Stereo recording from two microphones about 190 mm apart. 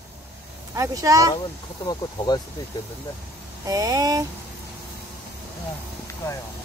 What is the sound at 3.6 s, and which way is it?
Speech, 20° right (ahead or behind).